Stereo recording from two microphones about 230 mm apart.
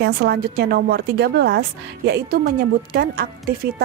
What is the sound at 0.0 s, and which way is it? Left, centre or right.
A woman's voice, right.